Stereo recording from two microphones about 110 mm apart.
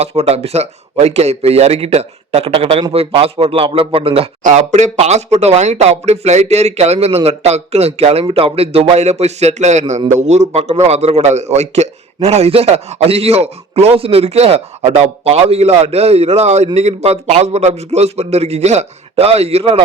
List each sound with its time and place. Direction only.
0.0 s a man's voice: 70° right (ahead or behind)
8.3 s a man's voice: 55° right (ahead or behind)